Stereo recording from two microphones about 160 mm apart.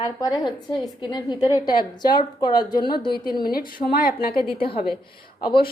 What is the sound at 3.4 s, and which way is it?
Speech, 65° left (ahead or behind).